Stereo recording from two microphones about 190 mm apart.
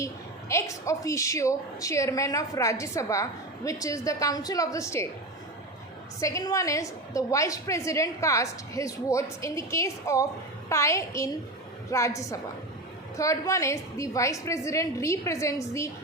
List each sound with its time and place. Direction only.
0.0 s a woman's voice: 15° left (ahead or behind)
6.1 s a woman's voice: 15° left (ahead or behind)